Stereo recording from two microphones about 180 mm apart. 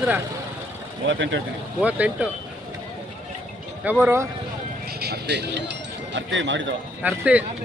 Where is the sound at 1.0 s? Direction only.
90° right.